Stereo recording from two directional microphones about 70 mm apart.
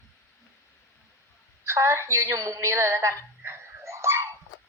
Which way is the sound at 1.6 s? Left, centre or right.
Right.